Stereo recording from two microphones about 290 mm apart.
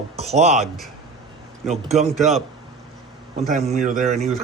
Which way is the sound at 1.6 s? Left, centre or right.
Right.